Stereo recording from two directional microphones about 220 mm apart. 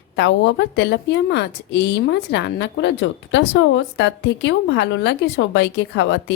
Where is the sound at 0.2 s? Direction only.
55° left (ahead or behind).